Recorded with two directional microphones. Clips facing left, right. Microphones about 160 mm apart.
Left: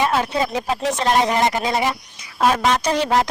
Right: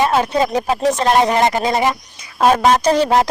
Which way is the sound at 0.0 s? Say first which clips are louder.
Right 4 dB; 40° right (ahead or behind).